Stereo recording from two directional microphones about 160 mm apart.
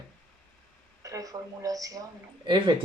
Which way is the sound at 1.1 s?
20° right (ahead or behind).